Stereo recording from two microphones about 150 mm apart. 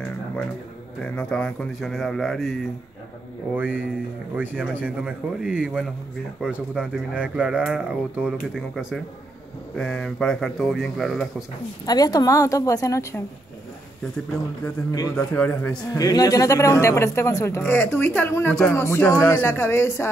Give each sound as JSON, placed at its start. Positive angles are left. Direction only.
{"t": 1.0, "sound": "speech", "side_deg": 5}
{"t": 3.5, "sound": "speech", "side_deg": -10}
{"t": 11.8, "sound": "speech", "side_deg": 25}
{"t": 15.1, "sound": "speech", "side_deg": 10}
{"t": 16.0, "sound": "speech", "side_deg": 25}